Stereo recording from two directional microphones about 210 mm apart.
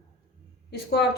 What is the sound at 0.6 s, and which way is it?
Speech, 55° left (ahead or behind).